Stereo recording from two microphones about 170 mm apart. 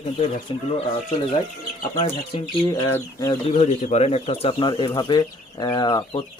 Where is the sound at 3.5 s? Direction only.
40° left (ahead or behind).